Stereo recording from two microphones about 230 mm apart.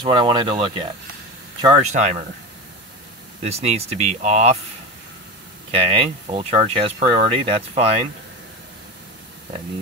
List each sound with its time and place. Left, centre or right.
0.0 s speech: right
1.9 s speech: right
3.4 s speech: right
5.7 s speech: right